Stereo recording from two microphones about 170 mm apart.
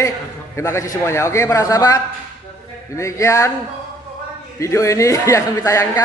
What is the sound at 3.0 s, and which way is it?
Speech, 15° left (ahead or behind).